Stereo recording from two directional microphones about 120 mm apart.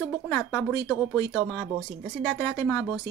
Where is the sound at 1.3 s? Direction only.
5° left (ahead or behind).